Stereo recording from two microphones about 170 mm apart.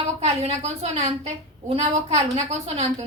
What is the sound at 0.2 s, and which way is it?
A woman's voice, 40° right (ahead or behind).